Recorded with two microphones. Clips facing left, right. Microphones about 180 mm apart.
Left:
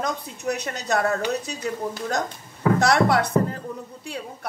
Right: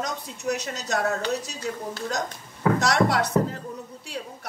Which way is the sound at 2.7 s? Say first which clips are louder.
Left 4 dB; 55° left (ahead or behind).